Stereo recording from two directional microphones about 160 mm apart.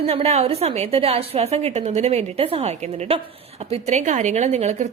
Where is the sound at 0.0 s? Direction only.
40° right (ahead or behind).